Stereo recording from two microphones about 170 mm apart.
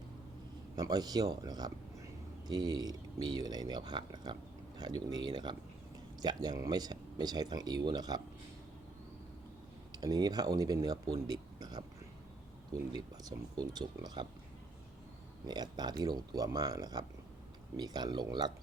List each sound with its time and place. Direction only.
0.8 s speech: 20° right (ahead or behind)
9.9 s speech: 25° right (ahead or behind)
13.0 s speech: 25° right (ahead or behind)
15.4 s speech: 25° right (ahead or behind)